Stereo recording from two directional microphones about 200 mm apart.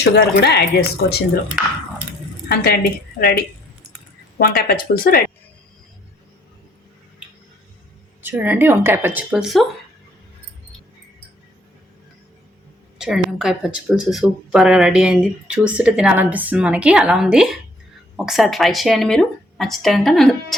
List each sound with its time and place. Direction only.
0.0 s speech: 60° left (ahead or behind)
2.5 s a woman's voice: 50° left (ahead or behind)
8.2 s speech: 10° right (ahead or behind)
13.0 s speech: 5° right (ahead or behind)